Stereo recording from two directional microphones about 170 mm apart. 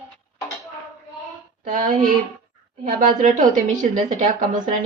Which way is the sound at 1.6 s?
50° right (ahead or behind).